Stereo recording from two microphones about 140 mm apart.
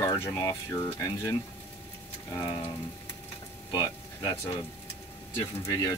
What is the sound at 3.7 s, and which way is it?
Speech, 25° left (ahead or behind).